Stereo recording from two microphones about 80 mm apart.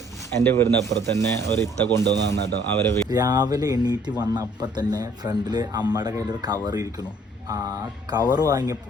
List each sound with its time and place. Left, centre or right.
0.4 s a man's voice: left
3.1 s speech: right
8.3 s speech: right